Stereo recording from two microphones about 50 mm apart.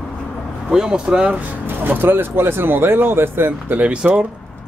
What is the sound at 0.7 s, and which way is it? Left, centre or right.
Speech, centre.